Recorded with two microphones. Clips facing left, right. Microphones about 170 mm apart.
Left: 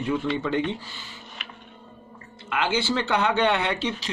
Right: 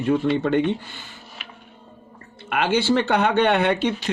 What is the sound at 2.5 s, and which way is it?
Speech, 60° right (ahead or behind).